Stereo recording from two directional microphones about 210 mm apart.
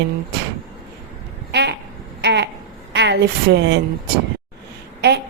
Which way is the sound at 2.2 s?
55° right (ahead or behind).